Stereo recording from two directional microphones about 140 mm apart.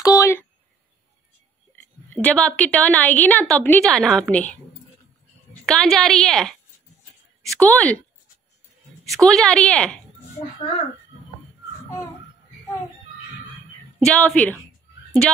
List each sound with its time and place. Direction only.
0.0 s a sound: 20° left (ahead or behind)
2.1 s a woman's voice: 5° left (ahead or behind)
9.1 s a woman's voice: 5° left (ahead or behind)
13.9 s a woman's voice: 5° left (ahead or behind)